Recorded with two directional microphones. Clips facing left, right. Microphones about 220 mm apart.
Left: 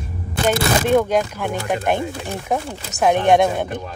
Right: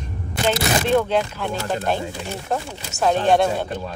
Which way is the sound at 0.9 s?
10° left (ahead or behind).